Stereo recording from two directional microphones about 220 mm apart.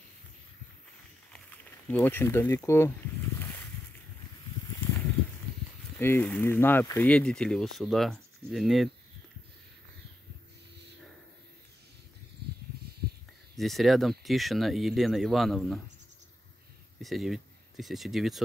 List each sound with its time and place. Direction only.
1.9 s speech: 10° left (ahead or behind)
3.3 s a sound: 10° left (ahead or behind)
5.9 s speech: 10° left (ahead or behind)
12.7 s a sound: 45° right (ahead or behind)
13.6 s speech: centre (ahead or behind)
17.0 s speech: centre (ahead or behind)